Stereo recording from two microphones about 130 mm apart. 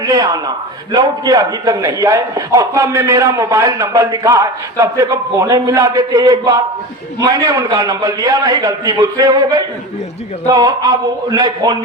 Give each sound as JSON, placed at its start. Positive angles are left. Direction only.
{"t": 0.0, "sound": "a man's voice", "side_deg": -25}